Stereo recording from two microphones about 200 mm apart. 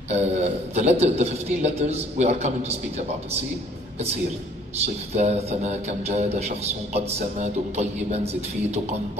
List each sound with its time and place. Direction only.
0.1 s a man's voice: 35° right (ahead or behind)
5.1 s a man's voice: 35° right (ahead or behind)